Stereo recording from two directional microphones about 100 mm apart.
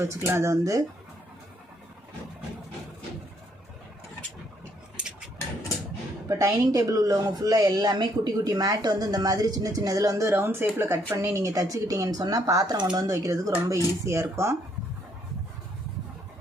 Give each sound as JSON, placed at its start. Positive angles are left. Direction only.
{"t": 0.0, "sound": "speech", "side_deg": -25}
{"t": 6.2, "sound": "speech", "side_deg": -35}